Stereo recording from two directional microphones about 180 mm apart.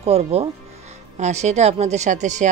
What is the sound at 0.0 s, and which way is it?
Speech, 35° right (ahead or behind).